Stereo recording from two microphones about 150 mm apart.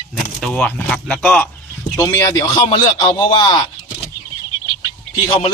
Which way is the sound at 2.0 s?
25° left (ahead or behind).